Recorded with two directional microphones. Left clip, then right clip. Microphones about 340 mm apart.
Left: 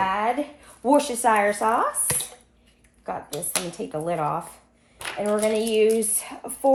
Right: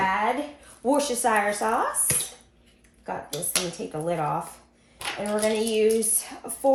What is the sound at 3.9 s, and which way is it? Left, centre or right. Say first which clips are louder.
Speech: left 5 dB; centre.